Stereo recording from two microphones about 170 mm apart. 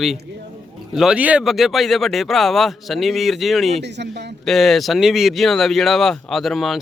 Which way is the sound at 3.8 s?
85° right.